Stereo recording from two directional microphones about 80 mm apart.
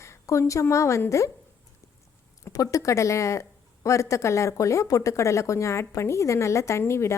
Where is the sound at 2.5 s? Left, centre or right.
Left.